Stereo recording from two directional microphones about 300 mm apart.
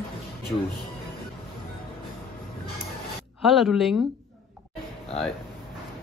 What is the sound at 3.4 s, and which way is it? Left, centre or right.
Speech, centre.